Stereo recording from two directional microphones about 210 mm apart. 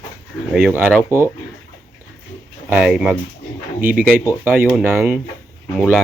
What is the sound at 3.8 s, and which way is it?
Speech, 45° right (ahead or behind).